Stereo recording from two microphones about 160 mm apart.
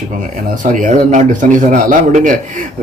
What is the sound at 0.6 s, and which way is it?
Speech, 55° right (ahead or behind).